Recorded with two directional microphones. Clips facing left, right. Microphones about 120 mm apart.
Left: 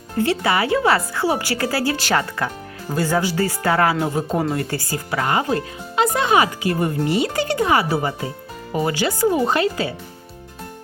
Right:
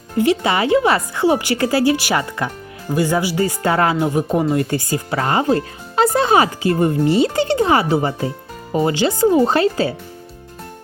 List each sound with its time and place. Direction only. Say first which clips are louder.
0.2 s speech: right 3 dB; 20° right (ahead or behind)